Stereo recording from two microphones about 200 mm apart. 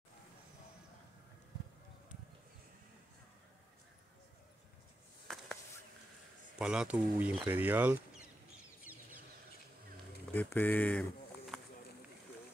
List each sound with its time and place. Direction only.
5.3 s a sound: centre (ahead or behind)
6.6 s speech: 5° right (ahead or behind)
8.9 s chicken: 45° left (ahead or behind)
10.3 s speech: 10° left (ahead or behind)